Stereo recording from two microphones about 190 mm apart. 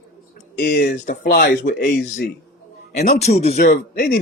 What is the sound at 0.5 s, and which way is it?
Speech, 50° left (ahead or behind).